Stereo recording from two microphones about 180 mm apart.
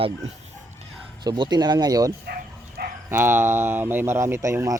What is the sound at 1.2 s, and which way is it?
Speech, 25° right (ahead or behind).